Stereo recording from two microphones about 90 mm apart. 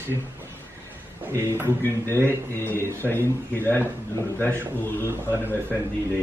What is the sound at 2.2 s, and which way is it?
Speech, 25° left (ahead or behind).